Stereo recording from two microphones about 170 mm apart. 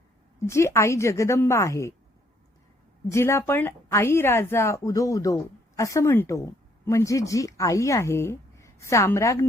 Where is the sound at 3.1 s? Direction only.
15° left (ahead or behind).